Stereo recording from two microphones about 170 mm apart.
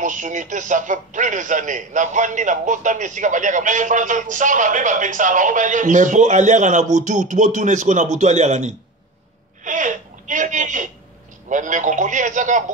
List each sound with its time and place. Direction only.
0.0 s a woman's voice: 50° right (ahead or behind)